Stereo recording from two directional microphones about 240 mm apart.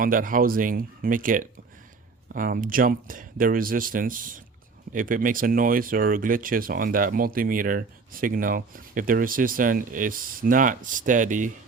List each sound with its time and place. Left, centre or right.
0.0 s speech: right